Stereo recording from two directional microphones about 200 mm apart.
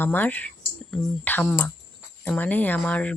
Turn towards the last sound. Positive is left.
turn(degrees=5)  # may be behind; listen again after turning